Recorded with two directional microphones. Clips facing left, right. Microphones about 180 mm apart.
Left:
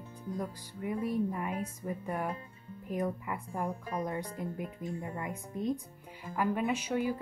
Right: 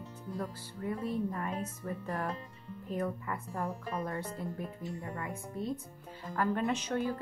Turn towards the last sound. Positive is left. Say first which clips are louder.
# left 1 dB
turn(degrees=10)  # may be behind; listen again after turning